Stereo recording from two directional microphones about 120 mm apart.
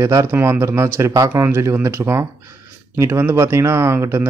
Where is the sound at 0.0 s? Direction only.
25° right (ahead or behind).